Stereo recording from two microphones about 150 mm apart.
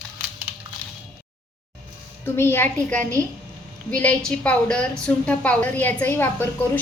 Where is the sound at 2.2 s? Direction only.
15° left (ahead or behind).